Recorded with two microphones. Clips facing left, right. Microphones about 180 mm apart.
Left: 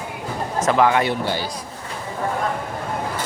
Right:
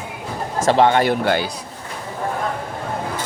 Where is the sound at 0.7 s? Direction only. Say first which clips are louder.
Right 3 dB; 30° right (ahead or behind).